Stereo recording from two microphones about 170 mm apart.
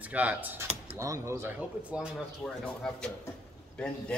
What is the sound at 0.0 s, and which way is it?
A man's voice, 10° right (ahead or behind).